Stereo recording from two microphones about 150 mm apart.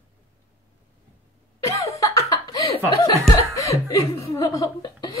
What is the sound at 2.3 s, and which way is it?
Chuckle, 25° left (ahead or behind).